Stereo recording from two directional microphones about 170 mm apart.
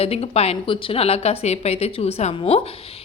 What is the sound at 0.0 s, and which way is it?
A woman's voice, 35° left (ahead or behind).